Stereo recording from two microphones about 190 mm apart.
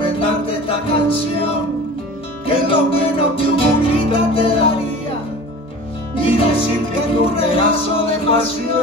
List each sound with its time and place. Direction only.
0.0 s music: 30° left (ahead or behind)
6.1 s music: 30° left (ahead or behind)